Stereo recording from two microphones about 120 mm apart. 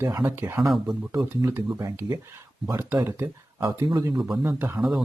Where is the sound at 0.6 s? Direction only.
Centre (ahead or behind).